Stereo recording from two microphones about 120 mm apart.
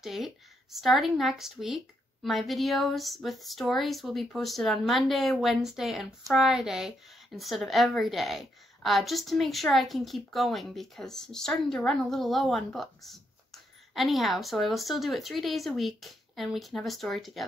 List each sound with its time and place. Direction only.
0.0 s a woman's voice: centre (ahead or behind)